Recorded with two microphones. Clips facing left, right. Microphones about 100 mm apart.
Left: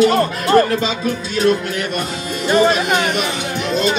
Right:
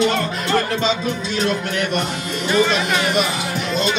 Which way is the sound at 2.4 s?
45° left (ahead or behind).